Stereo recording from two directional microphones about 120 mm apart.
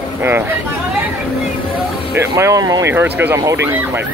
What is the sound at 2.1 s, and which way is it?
Speech, 25° right (ahead or behind).